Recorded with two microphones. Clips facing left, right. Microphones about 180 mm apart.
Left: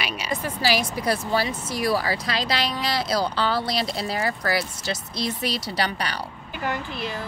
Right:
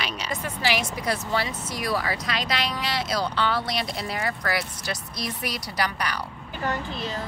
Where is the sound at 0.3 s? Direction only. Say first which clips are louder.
Left 3 dB; 35° left (ahead or behind).